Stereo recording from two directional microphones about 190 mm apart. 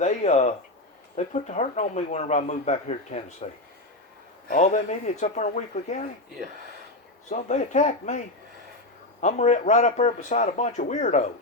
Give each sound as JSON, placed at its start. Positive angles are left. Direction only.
{"t": 0.0, "sound": "speech", "side_deg": 40}
{"t": 7.3, "sound": "speech", "side_deg": 40}
{"t": 9.2, "sound": "speech", "side_deg": 40}